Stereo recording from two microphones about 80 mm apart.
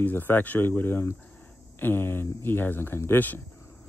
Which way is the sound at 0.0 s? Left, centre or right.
Left.